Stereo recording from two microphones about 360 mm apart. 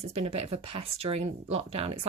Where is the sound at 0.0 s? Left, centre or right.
Centre.